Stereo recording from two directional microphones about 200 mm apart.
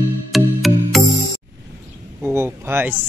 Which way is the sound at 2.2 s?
10° right (ahead or behind).